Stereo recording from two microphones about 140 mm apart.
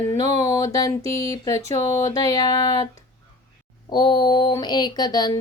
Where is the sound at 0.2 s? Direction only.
25° left (ahead or behind).